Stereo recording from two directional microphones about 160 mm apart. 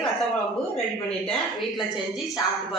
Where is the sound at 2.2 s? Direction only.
Centre (ahead or behind).